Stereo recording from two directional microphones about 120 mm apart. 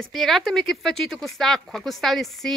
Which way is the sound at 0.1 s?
Centre (ahead or behind).